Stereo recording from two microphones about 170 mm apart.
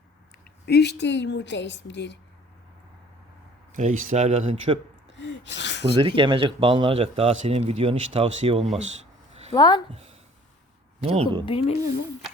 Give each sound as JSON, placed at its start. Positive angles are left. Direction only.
{"t": 0.6, "sound": "a woman's voice", "side_deg": 75}
{"t": 3.7, "sound": "speech", "side_deg": -45}
{"t": 5.1, "sound": "gasp", "side_deg": 90}
{"t": 6.0, "sound": "a man's voice", "side_deg": -30}
{"t": 9.6, "sound": "speech", "side_deg": 25}
{"t": 9.9, "sound": "a man's voice", "side_deg": -40}
{"t": 11.4, "sound": "speech", "side_deg": 35}